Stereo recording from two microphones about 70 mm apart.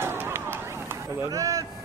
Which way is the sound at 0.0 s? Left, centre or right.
Right.